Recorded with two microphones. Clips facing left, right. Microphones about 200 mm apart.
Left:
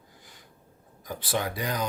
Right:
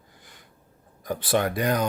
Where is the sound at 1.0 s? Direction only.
60° right (ahead or behind).